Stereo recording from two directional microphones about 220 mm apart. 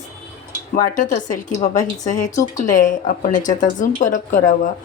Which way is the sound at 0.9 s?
35° left (ahead or behind).